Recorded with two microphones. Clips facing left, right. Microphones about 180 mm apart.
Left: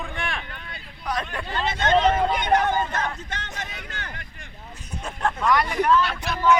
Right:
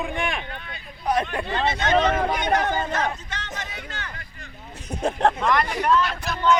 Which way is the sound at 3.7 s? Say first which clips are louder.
Right 1 dB; 55° left (ahead or behind).